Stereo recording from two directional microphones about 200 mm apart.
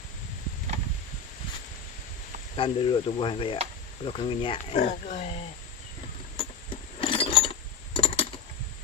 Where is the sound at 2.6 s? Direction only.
25° left (ahead or behind).